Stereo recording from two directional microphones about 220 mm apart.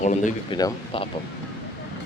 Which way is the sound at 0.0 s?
35° left (ahead or behind).